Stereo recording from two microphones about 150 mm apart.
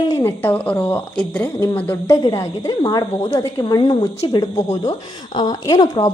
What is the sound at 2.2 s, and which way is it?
A woman's voice, 25° left (ahead or behind).